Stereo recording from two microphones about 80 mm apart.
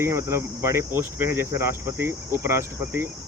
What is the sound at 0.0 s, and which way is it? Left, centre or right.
Speech, right.